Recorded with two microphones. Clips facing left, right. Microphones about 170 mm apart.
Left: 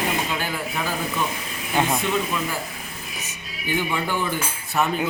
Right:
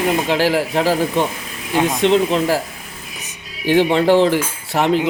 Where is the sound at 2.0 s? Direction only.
80° right.